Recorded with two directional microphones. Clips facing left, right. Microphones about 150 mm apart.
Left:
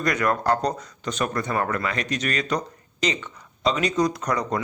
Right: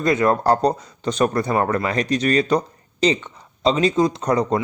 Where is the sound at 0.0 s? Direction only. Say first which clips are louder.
Right 5 dB; 25° right (ahead or behind).